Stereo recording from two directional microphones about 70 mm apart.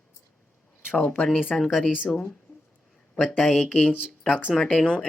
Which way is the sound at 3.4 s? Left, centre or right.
Centre.